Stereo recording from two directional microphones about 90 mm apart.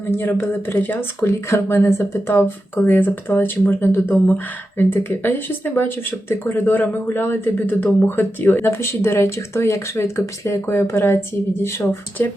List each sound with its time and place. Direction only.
0.2 s speech: 25° left (ahead or behind)
12.2 s speech: 25° left (ahead or behind)